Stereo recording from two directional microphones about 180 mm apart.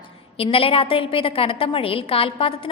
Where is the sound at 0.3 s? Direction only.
30° left (ahead or behind).